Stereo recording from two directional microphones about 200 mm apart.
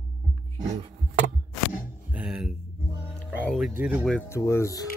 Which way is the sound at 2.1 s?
5° right (ahead or behind).